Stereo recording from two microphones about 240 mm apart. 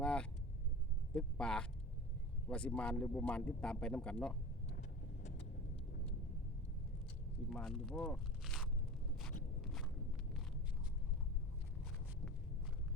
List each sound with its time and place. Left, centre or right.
0.0 s vehicle: centre
1.1 s speech: centre
4.7 s vehicle: left
7.5 s speech: centre
9.6 s walk: centre